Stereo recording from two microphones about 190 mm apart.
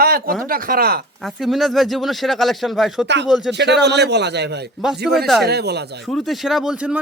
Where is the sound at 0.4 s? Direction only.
50° right (ahead or behind).